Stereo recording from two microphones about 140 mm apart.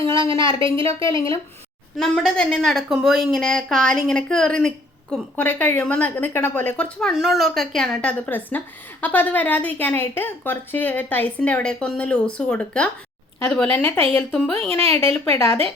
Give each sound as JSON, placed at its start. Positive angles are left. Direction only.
{"t": 0.0, "sound": "a woman's voice", "side_deg": -40}
{"t": 2.0, "sound": "a woman's voice", "side_deg": 5}
{"t": 14.3, "sound": "speech", "side_deg": 5}
{"t": 14.7, "sound": "a woman's voice", "side_deg": -45}